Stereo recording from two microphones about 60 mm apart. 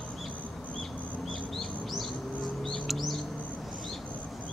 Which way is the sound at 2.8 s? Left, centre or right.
Centre.